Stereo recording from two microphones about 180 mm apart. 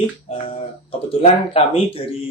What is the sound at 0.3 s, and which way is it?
Speech, 30° left (ahead or behind).